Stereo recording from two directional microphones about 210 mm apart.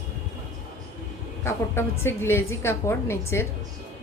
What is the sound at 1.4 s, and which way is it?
A woman's voice, 10° left (ahead or behind).